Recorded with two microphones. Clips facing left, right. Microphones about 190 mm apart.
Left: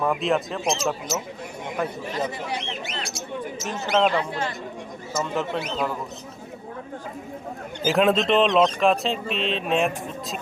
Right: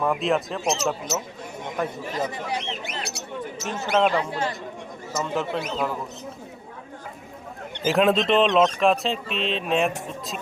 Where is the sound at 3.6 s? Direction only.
Centre (ahead or behind).